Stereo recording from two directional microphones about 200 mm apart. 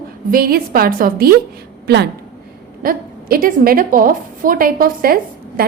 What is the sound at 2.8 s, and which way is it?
A woman's voice, 45° right (ahead or behind).